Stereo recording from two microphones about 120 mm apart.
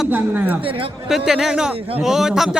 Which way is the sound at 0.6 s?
50° right (ahead or behind).